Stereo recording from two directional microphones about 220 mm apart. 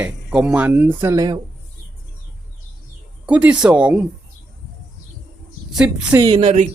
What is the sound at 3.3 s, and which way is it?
Speech, 5° right (ahead or behind).